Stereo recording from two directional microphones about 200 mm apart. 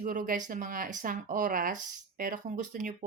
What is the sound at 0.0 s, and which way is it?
Speech, 40° right (ahead or behind).